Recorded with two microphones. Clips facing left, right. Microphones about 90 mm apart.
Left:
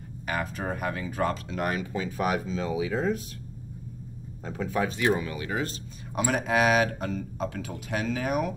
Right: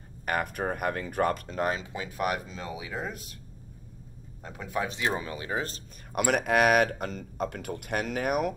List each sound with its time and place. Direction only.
0.3 s speech: 55° right (ahead or behind)
1.6 s speech: 20° right (ahead or behind)
2.2 s speech: 5° right (ahead or behind)
4.5 s speech: 10° right (ahead or behind); by 5.8 s 35° right (ahead or behind)
6.1 s speech: 70° right (ahead or behind)